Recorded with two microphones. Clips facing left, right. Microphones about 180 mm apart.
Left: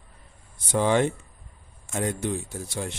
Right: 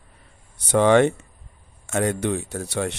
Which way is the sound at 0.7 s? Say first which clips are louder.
Right 6 dB; 70° right (ahead or behind).